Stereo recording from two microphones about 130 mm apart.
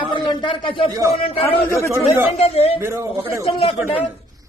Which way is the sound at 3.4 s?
45° left (ahead or behind).